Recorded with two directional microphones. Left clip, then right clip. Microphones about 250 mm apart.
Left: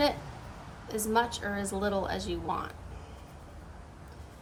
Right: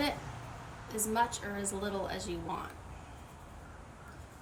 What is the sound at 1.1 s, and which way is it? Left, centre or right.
A woman's voice, centre.